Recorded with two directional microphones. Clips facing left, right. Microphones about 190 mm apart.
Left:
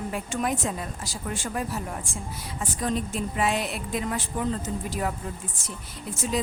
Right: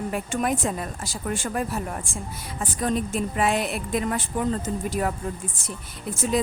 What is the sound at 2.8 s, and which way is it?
A woman's voice, 55° right (ahead or behind).